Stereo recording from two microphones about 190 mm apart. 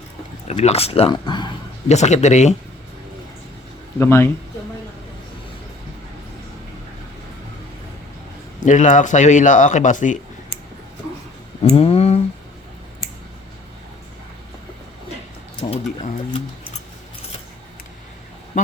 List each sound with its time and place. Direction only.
0.4 s speech: 35° left (ahead or behind)
1.9 s speech: 35° left (ahead or behind)
3.9 s speech: 10° left (ahead or behind)
8.6 s speech: 40° left (ahead or behind)
11.6 s a sound: 30° left (ahead or behind)
15.6 s a sound: 25° left (ahead or behind)
18.5 s duck: 40° left (ahead or behind)